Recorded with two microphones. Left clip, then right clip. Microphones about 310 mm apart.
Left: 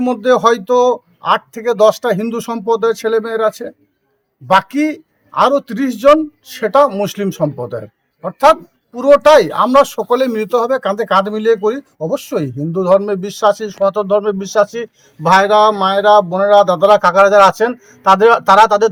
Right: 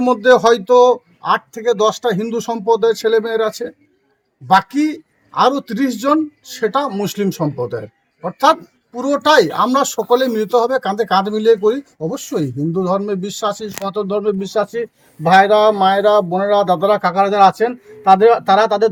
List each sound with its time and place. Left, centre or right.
0.0 s speech: centre
4.6 s speech: centre
9.0 s speech: centre